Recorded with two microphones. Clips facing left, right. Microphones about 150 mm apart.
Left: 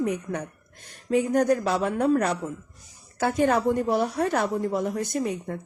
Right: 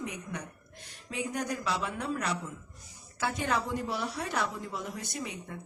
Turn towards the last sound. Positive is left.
turn(degrees=50)  # may be behind; listen again after turning